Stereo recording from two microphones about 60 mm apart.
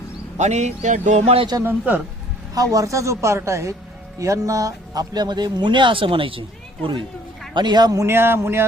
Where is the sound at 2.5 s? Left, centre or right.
Right.